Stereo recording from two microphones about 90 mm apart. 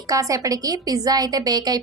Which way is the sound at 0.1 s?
40° right (ahead or behind).